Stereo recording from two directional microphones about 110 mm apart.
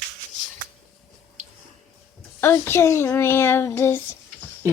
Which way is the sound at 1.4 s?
90° right.